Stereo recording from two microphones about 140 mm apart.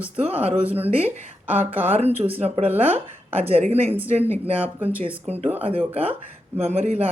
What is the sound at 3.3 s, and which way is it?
Speech, 45° right (ahead or behind).